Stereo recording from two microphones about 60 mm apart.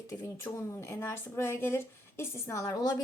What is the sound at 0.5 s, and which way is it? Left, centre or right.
A woman's voice, left.